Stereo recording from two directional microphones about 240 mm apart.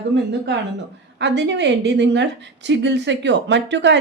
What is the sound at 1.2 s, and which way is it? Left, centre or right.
A woman's voice, right.